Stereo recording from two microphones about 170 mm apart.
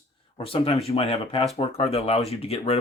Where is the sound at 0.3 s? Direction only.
35° left (ahead or behind).